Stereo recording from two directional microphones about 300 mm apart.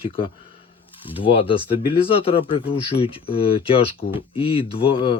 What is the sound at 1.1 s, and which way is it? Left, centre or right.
Speech, centre.